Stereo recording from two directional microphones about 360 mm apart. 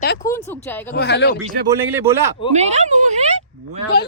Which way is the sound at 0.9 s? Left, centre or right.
Left.